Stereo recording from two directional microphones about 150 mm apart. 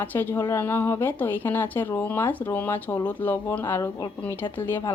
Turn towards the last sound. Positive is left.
turn(degrees=15)  # may be behind; listen again after turning